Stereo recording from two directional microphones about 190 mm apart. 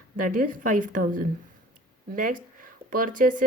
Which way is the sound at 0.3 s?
45° right (ahead or behind).